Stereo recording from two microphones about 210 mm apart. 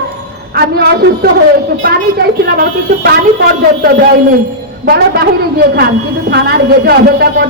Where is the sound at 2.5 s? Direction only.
50° right (ahead or behind).